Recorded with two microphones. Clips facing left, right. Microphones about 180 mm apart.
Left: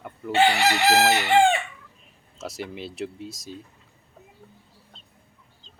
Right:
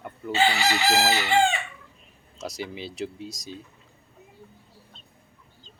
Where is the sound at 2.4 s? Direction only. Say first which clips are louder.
Even; centre (ahead or behind).